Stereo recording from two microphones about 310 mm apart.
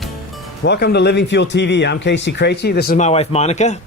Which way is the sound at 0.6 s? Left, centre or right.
Left.